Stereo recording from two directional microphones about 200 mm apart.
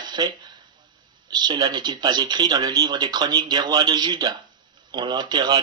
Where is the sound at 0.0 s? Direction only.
20° right (ahead or behind).